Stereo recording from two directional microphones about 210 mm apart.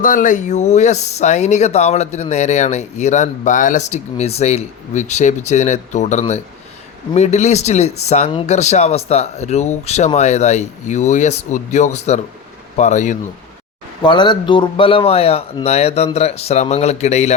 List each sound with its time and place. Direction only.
0.0 s speech: 40° left (ahead or behind)
14.0 s speech: 20° left (ahead or behind)